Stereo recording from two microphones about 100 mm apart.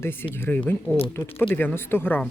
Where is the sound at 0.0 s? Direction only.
20° left (ahead or behind).